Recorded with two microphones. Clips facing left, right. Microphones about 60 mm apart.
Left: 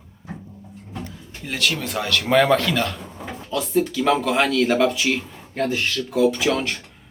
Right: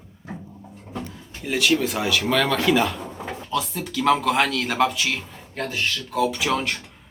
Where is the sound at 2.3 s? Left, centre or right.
Centre.